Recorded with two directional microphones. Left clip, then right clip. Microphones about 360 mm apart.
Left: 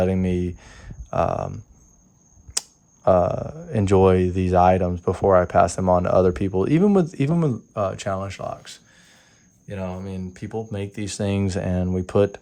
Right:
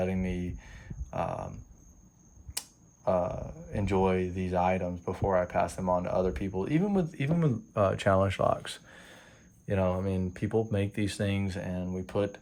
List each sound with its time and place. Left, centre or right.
0.0 s speech: centre
2.6 s speech: centre